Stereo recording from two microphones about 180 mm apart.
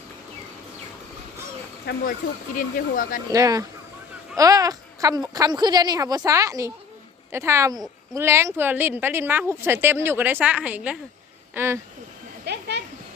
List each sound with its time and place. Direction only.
1.9 s speech: 60° left (ahead or behind)
2.6 s speech: 50° left (ahead or behind)
3.3 s a woman's voice: 20° right (ahead or behind)
12.5 s a sound: 70° right (ahead or behind)